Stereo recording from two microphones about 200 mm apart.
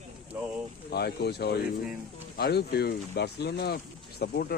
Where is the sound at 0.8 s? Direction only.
55° left (ahead or behind).